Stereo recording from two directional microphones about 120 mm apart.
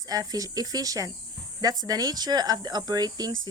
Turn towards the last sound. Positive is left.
turn(degrees=-35)  # may be behind; listen again after turning